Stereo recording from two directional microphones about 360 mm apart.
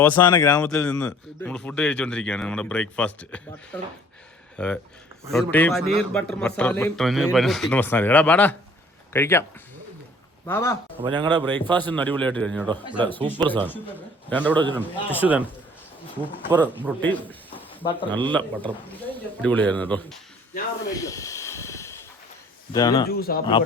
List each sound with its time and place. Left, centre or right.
0.0 s speech: centre
10.4 s speech: centre
11.0 s speech: centre
11.4 s speech: centre
16.5 s speech: centre
20.9 s hiss: centre
22.7 s speech: centre
23.0 s speech: left